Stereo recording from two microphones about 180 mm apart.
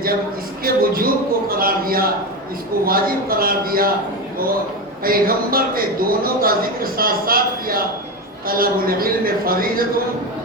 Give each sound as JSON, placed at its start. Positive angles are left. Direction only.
{"t": 0.6, "sound": "a man's voice", "side_deg": -55}
{"t": 5.0, "sound": "speech", "side_deg": -55}